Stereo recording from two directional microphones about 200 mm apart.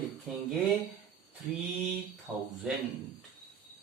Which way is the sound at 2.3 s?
5° left (ahead or behind).